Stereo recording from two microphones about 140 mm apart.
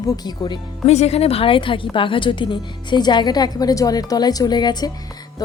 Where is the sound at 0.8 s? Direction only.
50° left (ahead or behind).